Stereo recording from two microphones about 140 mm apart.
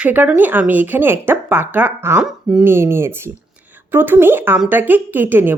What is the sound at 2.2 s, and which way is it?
Speech, 5° right (ahead or behind).